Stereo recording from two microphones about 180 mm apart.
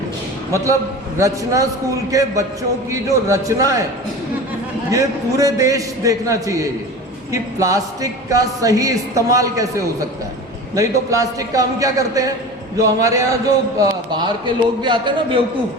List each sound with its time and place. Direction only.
0.5 s a man's voice: 15° right (ahead or behind)
4.9 s a man's voice: 20° right (ahead or behind)